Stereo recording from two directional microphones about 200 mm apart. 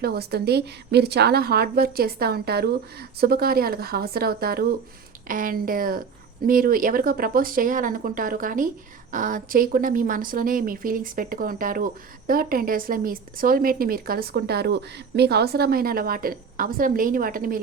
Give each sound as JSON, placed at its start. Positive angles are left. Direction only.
{"t": 0.0, "sound": "speech", "side_deg": -50}